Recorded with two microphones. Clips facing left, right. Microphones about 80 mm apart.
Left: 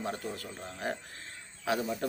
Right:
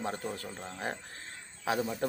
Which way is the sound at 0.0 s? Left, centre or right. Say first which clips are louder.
Right 1 dB; right.